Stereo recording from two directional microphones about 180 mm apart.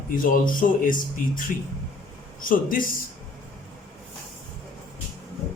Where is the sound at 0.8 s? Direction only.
50° left (ahead or behind).